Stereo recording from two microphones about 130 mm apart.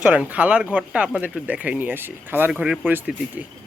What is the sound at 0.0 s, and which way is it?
Speech, 10° right (ahead or behind).